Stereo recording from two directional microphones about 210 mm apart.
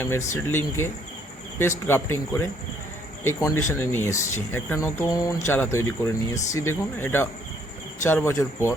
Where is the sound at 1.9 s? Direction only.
10° left (ahead or behind).